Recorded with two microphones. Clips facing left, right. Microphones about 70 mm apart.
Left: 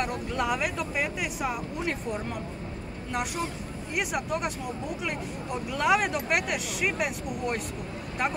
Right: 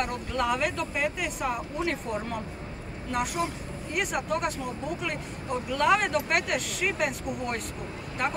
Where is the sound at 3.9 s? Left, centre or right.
Centre.